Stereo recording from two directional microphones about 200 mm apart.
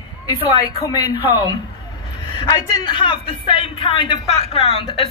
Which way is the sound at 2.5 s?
20° left (ahead or behind).